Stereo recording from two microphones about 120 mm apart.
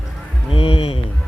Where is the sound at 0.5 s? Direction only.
50° left (ahead or behind).